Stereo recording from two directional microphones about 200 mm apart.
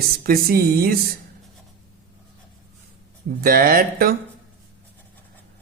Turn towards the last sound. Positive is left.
turn(degrees=-45)  # may be behind; listen again after turning